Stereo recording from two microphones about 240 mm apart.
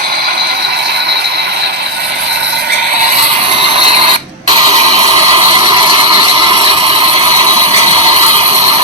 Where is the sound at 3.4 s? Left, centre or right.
Right.